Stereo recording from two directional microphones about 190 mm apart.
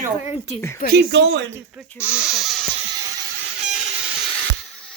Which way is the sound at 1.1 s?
65° right (ahead or behind).